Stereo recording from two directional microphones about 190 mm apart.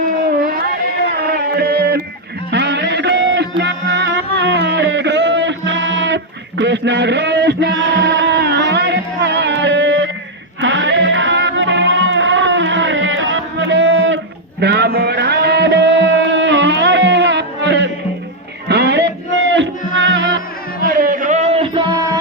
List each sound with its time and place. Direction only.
1.1 s a sound: 55° right (ahead or behind)
2.5 s music: 65° right (ahead or behind)
14.6 s music: 60° right (ahead or behind)
20.8 s music: 50° right (ahead or behind); by 22.2 s 25° right (ahead or behind)